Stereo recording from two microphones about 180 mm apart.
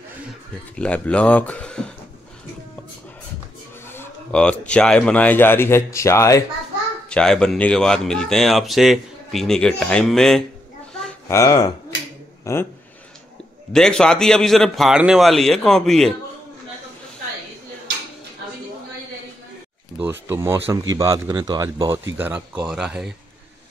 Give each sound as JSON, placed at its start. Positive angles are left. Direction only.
{"t": 0.7, "sound": "speech", "side_deg": 5}
{"t": 3.8, "sound": "speech", "side_deg": 10}
{"t": 7.1, "sound": "speech", "side_deg": 5}
{"t": 11.2, "sound": "speech", "side_deg": 15}
{"t": 13.7, "sound": "speech", "side_deg": 5}
{"t": 20.0, "sound": "speech", "side_deg": -10}